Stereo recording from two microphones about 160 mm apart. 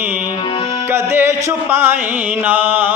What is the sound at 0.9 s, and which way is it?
A man's voice, 15° right (ahead or behind).